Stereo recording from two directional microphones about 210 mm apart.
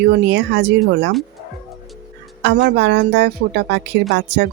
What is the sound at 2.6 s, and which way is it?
Speech, 50° right (ahead or behind).